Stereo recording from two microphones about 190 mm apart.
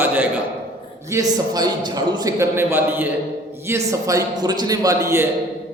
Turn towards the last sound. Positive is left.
turn(degrees=-15)  # may be behind; listen again after turning